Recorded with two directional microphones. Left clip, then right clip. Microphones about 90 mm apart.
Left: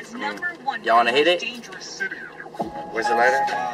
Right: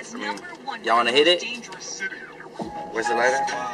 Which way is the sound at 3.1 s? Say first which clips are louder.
Left 3 dB; centre (ahead or behind).